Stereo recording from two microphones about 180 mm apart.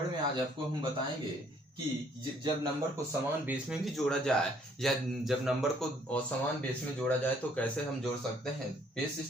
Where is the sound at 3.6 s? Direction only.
Centre (ahead or behind).